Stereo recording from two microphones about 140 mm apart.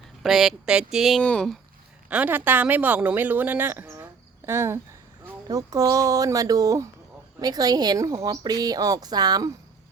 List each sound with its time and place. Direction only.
0.2 s speech: centre (ahead or behind)
2.0 s a woman's voice: 10° right (ahead or behind); by 9.5 s 30° right (ahead or behind)